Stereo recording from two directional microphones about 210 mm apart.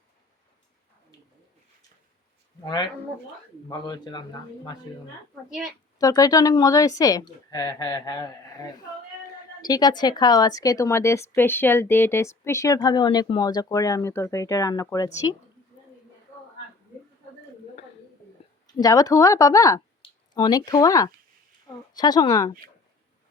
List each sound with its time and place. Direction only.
3.7 s a man's voice: 20° left (ahead or behind)
5.5 s a woman's voice: centre (ahead or behind)
6.0 s a woman's voice: 15° left (ahead or behind)
18.8 s a man's voice: 15° left (ahead or behind)